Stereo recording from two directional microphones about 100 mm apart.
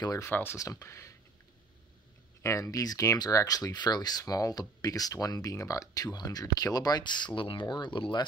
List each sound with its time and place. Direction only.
0.2 s speech: 25° left (ahead or behind)
0.6 s speech: 35° left (ahead or behind)
2.4 s speech: 35° left (ahead or behind); by 8.3 s 50° left (ahead or behind)